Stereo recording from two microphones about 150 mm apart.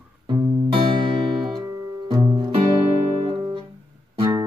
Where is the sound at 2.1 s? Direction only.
30° right (ahead or behind).